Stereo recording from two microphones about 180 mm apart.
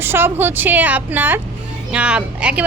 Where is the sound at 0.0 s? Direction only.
10° right (ahead or behind).